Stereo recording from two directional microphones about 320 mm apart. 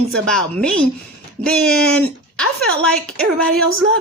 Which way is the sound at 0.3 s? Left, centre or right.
Centre.